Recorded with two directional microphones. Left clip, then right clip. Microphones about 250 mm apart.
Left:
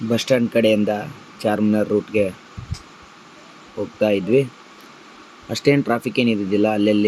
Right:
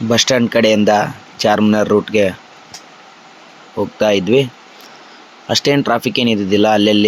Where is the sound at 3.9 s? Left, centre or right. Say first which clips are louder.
Right 4 dB; centre.